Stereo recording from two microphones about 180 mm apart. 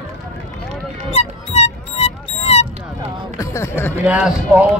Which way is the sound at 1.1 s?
35° left (ahead or behind).